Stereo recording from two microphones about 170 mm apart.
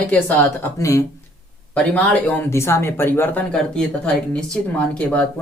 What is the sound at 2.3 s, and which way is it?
Speech, 15° left (ahead or behind).